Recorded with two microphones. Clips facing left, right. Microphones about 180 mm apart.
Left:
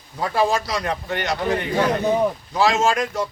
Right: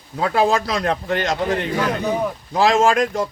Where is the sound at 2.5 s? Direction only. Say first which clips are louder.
Right 6 dB; 55° right (ahead or behind).